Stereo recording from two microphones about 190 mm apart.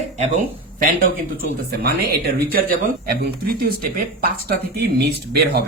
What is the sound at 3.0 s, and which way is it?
Speech, 55° right (ahead or behind).